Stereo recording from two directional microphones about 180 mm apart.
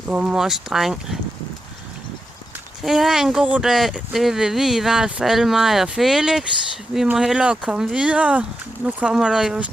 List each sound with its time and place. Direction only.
0.1 s speech: 5° right (ahead or behind)
2.8 s speech: centre (ahead or behind)